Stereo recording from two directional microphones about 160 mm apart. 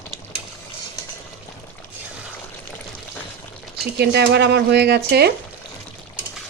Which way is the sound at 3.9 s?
90° right.